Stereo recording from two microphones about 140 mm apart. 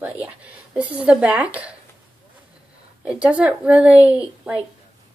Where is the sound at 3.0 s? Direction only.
10° right (ahead or behind).